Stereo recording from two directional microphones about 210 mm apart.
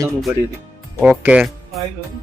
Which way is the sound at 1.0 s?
5° right (ahead or behind).